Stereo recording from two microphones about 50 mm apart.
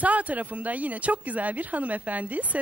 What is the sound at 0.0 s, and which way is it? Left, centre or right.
A woman's voice, right.